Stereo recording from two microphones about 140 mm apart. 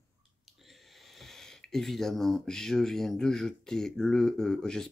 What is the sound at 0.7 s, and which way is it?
Speech, centre (ahead or behind).